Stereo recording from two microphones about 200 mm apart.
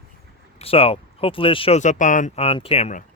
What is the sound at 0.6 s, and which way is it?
Speech, 30° left (ahead or behind).